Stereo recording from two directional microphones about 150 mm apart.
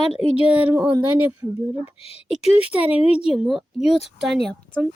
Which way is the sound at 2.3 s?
10° right (ahead or behind).